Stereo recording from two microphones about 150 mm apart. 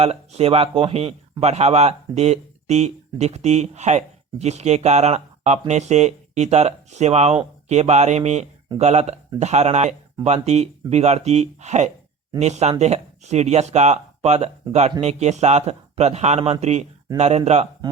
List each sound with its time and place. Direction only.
0.0 s speech: 45° right (ahead or behind)